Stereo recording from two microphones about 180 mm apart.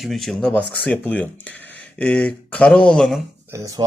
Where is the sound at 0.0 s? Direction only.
Centre (ahead or behind).